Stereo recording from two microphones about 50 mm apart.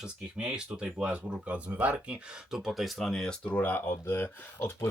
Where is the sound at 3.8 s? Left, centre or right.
Left.